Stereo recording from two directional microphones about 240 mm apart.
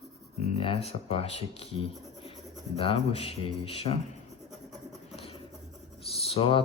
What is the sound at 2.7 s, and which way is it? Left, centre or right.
Speech, left.